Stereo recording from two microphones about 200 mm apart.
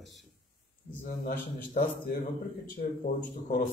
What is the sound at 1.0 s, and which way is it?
Speech, 45° left (ahead or behind).